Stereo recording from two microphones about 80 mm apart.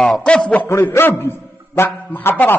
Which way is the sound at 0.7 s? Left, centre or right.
Left.